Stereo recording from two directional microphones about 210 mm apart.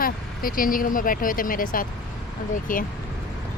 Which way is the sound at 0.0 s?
40° left (ahead or behind).